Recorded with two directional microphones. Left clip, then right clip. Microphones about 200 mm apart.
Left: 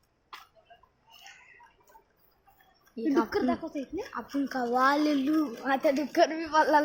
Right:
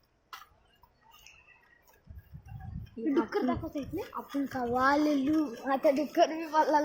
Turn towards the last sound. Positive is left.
turn(degrees=20)  # may be behind; listen again after turning